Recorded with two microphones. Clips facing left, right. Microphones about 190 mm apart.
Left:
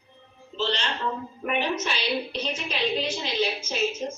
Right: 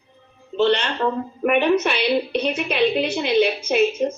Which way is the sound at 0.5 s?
60° right (ahead or behind).